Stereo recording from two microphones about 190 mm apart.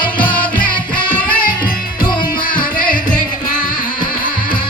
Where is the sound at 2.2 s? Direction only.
45° left (ahead or behind).